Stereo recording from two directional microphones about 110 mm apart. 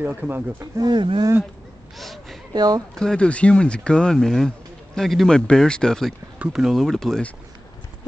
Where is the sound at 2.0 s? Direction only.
Centre (ahead or behind).